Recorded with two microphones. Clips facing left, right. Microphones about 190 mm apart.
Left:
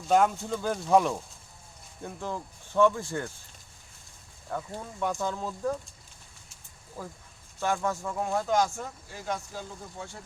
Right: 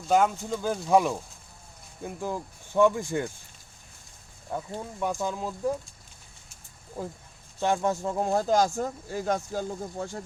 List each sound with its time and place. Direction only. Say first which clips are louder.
0.1 s speech: even; centre (ahead or behind)
4.4 s speech: right 2 dB; 15° right (ahead or behind)
7.6 s speech: right 3 dB; 25° right (ahead or behind); by 10.2 s 40° right (ahead or behind)